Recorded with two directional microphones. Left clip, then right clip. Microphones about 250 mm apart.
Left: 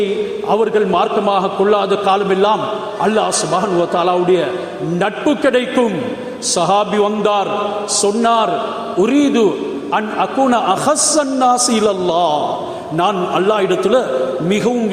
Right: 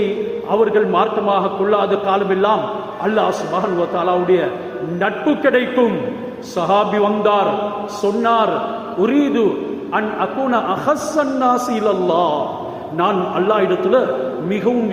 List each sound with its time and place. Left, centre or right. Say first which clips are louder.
0.5 s a man's voice: even; left